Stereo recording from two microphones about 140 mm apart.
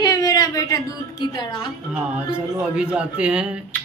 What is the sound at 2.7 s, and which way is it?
Speech, 10° right (ahead or behind).